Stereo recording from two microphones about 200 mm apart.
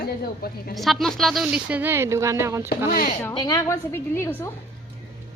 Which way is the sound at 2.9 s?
45° left (ahead or behind).